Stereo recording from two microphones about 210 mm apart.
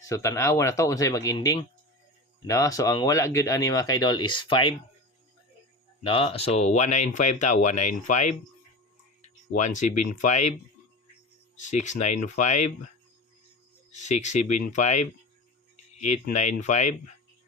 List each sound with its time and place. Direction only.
0.1 s speech: 15° left (ahead or behind)
6.0 s speech: 25° left (ahead or behind)
9.6 s speech: 35° left (ahead or behind)
11.5 s speech: 35° left (ahead or behind)
13.9 s speech: 35° left (ahead or behind)